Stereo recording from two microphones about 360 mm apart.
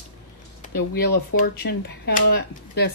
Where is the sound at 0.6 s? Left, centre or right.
Left.